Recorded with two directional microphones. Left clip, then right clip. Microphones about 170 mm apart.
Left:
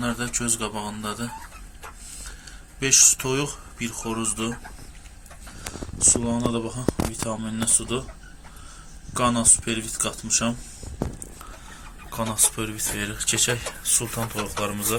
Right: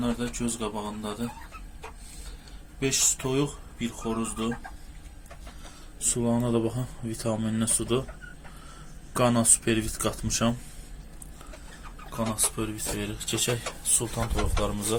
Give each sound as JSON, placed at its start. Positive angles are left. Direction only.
{"t": 0.0, "sound": "speech", "side_deg": 0}
{"t": 2.8, "sound": "speech", "side_deg": 0}
{"t": 6.0, "sound": "speech", "side_deg": -20}
{"t": 9.1, "sound": "speech", "side_deg": -20}
{"t": 12.1, "sound": "speech", "side_deg": -5}